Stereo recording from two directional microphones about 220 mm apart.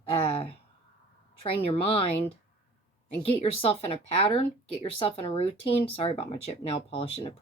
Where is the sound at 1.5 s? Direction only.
25° left (ahead or behind).